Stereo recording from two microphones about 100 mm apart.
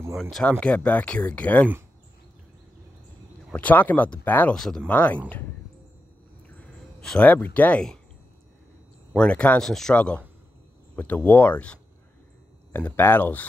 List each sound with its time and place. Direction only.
0.1 s speech: 5° left (ahead or behind)
3.5 s speech: 15° left (ahead or behind)
4.6 s speech: 5° left (ahead or behind)
6.6 s speech: 10° left (ahead or behind)
9.1 s speech: 10° left (ahead or behind)